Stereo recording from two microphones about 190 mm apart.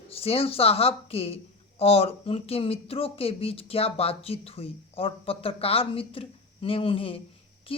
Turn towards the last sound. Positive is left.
turn(degrees=30)  # may be behind; listen again after turning